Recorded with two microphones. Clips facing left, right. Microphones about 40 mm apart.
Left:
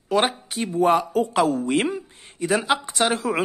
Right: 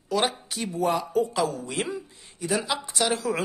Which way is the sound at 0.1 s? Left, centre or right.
Left.